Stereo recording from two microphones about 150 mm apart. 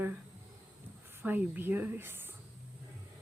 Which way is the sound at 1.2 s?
10° right (ahead or behind).